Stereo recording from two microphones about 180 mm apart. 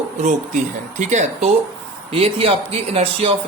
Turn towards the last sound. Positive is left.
turn(degrees=-30)  # may be behind; listen again after turning